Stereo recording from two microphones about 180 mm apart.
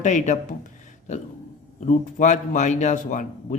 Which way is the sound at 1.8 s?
45° left (ahead or behind).